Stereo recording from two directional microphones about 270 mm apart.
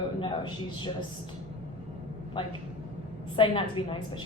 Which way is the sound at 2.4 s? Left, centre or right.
Centre.